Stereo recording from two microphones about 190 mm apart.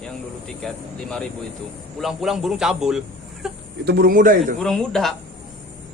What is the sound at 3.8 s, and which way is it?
Speech, 55° right (ahead or behind).